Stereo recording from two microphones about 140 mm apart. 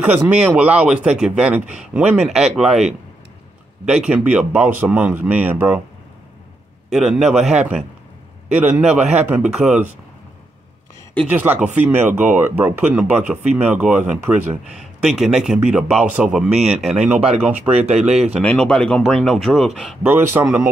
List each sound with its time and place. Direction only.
0.0 s speech: 10° right (ahead or behind)
6.9 s speech: 5° right (ahead or behind)
11.7 s speech: 15° right (ahead or behind)
17.7 s speech: 50° right (ahead or behind)
18.4 s speech: 10° left (ahead or behind); by 20.4 s 15° right (ahead or behind)